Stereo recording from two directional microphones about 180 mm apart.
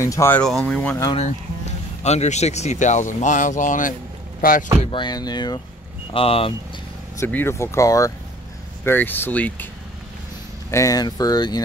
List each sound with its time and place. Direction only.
0.0 s speech: 15° left (ahead or behind)
0.4 s speech: centre (ahead or behind)
2.0 s speech: 40° left (ahead or behind)
4.9 s speech: 25° left (ahead or behind)
7.2 s speech: 10° left (ahead or behind)
10.7 s speech: 20° left (ahead or behind)